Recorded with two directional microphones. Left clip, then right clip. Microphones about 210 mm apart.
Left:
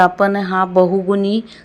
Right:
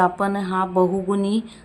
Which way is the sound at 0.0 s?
15° left (ahead or behind).